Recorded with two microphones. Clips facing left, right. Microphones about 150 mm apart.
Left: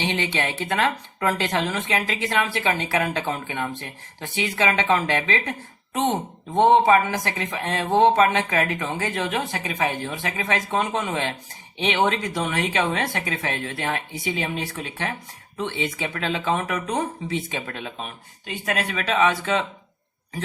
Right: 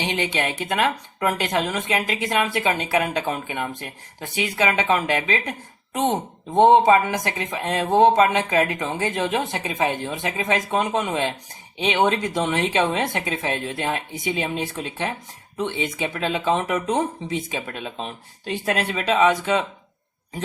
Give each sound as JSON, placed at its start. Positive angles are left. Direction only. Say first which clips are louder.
{"t": 0.0, "sound": "speech", "louder": "right 1 dB", "side_deg": -15}
{"t": 18.0, "sound": "speech", "louder": "right 4 dB", "side_deg": -30}